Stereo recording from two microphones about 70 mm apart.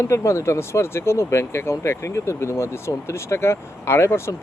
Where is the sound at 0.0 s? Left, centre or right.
Left.